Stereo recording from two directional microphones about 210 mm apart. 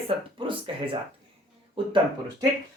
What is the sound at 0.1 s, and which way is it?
Speech, 25° right (ahead or behind).